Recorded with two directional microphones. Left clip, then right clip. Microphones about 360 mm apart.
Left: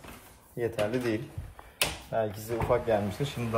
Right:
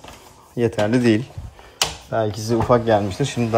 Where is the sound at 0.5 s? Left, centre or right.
Centre.